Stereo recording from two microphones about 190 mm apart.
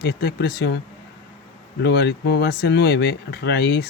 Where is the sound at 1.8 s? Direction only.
60° left (ahead or behind).